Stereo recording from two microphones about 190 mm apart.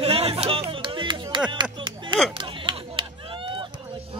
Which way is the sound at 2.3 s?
25° right (ahead or behind).